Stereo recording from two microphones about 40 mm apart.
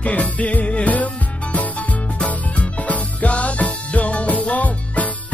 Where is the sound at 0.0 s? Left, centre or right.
Left.